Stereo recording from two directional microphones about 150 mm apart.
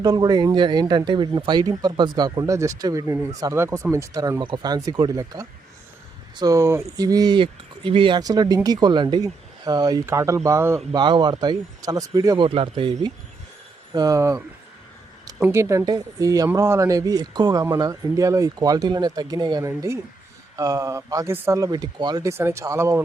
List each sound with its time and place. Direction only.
0.0 s speech: 25° right (ahead or behind)
10.9 s speech: 30° right (ahead or behind)
12.5 s speech: 35° right (ahead or behind); by 23.0 s 20° right (ahead or behind)